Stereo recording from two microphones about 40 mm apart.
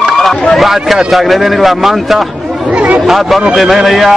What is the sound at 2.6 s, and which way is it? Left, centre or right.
Chatter, right.